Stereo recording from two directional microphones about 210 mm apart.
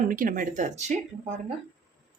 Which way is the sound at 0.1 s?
40° right (ahead or behind).